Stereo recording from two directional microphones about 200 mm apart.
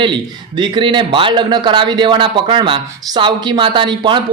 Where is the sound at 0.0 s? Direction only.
25° right (ahead or behind).